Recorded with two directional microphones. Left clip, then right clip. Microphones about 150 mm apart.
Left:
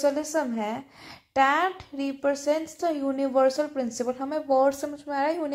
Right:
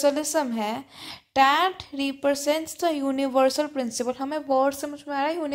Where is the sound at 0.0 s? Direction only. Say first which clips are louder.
Right 2 dB; 20° right (ahead or behind).